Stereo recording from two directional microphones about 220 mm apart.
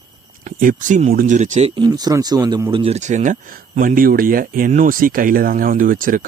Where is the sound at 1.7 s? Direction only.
20° right (ahead or behind); by 6.3 s 40° right (ahead or behind).